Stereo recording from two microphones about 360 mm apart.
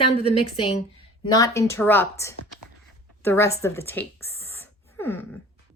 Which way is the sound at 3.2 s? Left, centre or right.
Centre.